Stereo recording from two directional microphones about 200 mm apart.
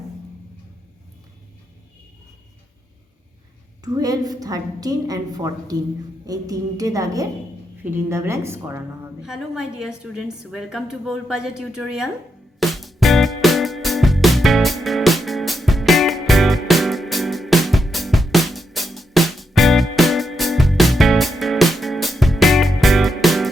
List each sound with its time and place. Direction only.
3.8 s a woman's voice: 20° right (ahead or behind)
9.2 s a woman's voice: centre (ahead or behind)
12.5 s music: centre (ahead or behind)